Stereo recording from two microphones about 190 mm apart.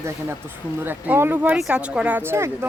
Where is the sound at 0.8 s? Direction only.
10° right (ahead or behind).